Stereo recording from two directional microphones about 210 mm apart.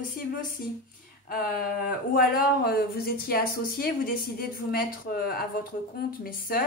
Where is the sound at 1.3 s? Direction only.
45° left (ahead or behind).